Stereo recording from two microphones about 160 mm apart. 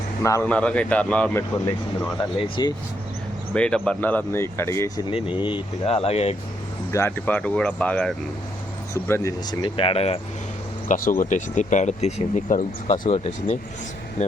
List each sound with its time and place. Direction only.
0.2 s speech: 20° left (ahead or behind)
0.5 s speech: 10° left (ahead or behind)
2.4 s speech: 25° left (ahead or behind)
3.5 s speech: 5° left (ahead or behind)
5.4 s speech: 30° left (ahead or behind)
6.9 s speech: 15° left (ahead or behind)
8.9 s speech: 15° left (ahead or behind); by 10.2 s 35° left (ahead or behind)
10.8 s speech: 60° left (ahead or behind)